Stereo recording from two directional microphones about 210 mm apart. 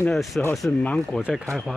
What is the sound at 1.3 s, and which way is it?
Speech, 5° right (ahead or behind).